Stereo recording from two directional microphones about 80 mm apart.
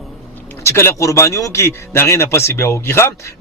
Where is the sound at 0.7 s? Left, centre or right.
Left.